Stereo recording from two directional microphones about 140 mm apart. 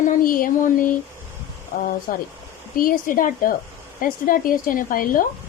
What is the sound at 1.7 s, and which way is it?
Speech, 90° left.